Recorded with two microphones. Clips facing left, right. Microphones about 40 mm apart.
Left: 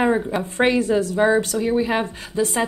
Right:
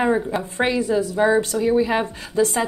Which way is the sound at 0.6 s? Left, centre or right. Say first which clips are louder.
Left 2 dB; left.